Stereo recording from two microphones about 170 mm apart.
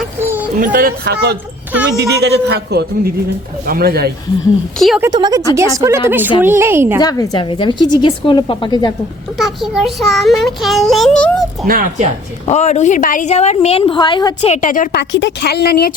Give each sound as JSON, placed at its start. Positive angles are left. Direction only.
{"t": 0.2, "sound": "a sound", "side_deg": -15}
{"t": 0.6, "sound": "a man's voice", "side_deg": -55}
{"t": 3.7, "sound": "a man's voice", "side_deg": -65}
{"t": 4.9, "sound": "a woman's voice", "side_deg": -20}
{"t": 7.0, "sound": "a woman's voice", "side_deg": 20}
{"t": 9.4, "sound": "child singing", "side_deg": 0}
{"t": 11.6, "sound": "a man's voice", "side_deg": -55}
{"t": 12.5, "sound": "a woman's voice", "side_deg": 40}
{"t": 14.4, "sound": "a woman's voice", "side_deg": 45}
{"t": 14.9, "sound": "a woman's voice", "side_deg": 80}